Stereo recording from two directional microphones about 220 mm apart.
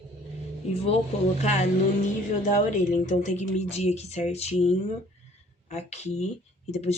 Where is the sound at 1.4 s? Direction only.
30° left (ahead or behind).